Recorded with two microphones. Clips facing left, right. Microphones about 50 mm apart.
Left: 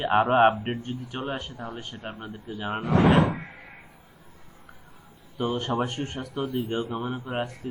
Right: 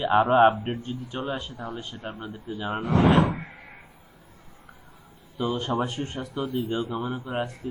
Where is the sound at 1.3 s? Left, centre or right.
Left.